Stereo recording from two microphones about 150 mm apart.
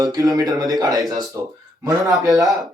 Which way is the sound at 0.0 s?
25° right (ahead or behind).